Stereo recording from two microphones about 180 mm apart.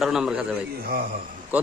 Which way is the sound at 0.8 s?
55° right (ahead or behind).